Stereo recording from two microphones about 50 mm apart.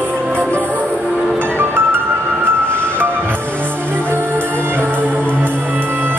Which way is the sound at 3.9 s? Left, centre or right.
Right.